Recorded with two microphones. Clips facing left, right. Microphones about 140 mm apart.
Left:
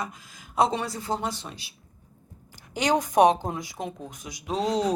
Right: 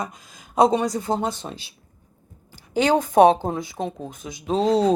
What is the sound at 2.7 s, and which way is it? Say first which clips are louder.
Speech: right 5 dB; 30° right (ahead or behind).